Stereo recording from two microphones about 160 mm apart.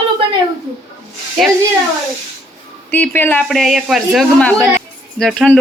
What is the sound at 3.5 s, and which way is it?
Speech, centre (ahead or behind).